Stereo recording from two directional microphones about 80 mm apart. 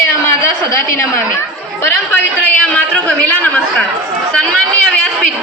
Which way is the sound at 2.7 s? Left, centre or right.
Centre.